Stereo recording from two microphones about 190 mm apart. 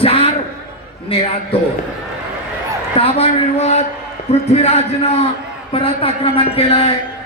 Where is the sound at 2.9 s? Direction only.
30° left (ahead or behind).